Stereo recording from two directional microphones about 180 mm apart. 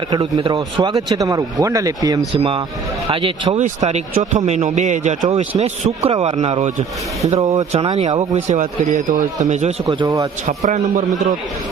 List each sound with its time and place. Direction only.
0.1 s a man's voice: 30° right (ahead or behind)
9.8 s speech: 20° right (ahead or behind)
10.4 s a man's voice: 40° right (ahead or behind)